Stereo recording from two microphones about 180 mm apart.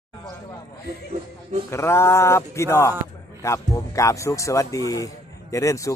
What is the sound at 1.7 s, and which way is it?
Speech, 15° left (ahead or behind).